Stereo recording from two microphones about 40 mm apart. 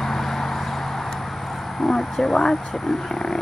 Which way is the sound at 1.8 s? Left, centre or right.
Centre.